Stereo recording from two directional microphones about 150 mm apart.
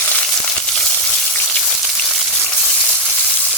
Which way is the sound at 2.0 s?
Centre (ahead or behind).